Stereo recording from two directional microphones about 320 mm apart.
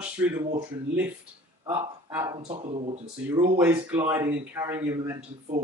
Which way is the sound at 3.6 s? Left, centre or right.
Centre.